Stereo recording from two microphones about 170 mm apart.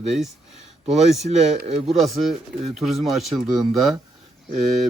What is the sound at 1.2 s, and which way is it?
Speech, 45° right (ahead or behind).